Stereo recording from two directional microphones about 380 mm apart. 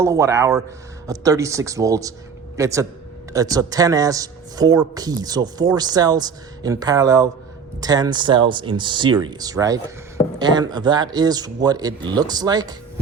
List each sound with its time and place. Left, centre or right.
0.0 s speech: centre